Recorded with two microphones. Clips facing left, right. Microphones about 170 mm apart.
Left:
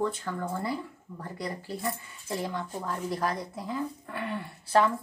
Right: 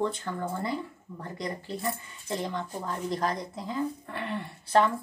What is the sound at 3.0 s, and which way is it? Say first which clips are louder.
Speech: right 2 dB; 5° left (ahead or behind).